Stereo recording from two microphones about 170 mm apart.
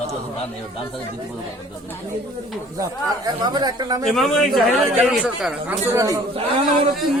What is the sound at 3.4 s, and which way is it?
Speech, 25° right (ahead or behind).